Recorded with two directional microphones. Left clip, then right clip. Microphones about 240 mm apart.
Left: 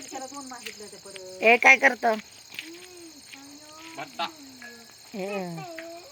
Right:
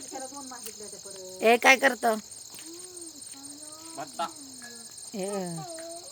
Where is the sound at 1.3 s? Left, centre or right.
Centre.